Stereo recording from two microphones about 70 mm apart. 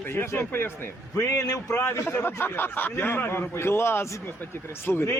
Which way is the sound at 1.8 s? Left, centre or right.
Left.